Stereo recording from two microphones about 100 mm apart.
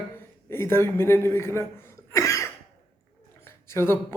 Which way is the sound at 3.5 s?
25° left (ahead or behind).